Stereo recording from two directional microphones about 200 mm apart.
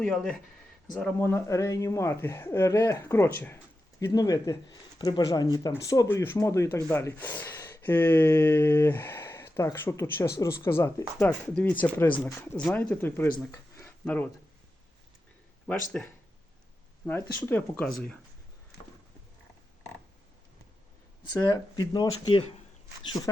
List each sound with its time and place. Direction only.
0.0 s speech: 5° left (ahead or behind)
13.5 s a sound: 10° left (ahead or behind)
15.6 s speech: centre (ahead or behind)
17.1 s speech: 10° left (ahead or behind)
21.3 s speech: 20° left (ahead or behind)